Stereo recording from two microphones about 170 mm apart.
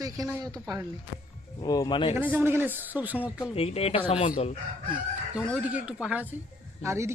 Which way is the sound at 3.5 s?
35° left (ahead or behind).